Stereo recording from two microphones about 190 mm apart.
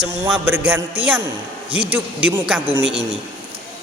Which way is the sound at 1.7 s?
30° right (ahead or behind).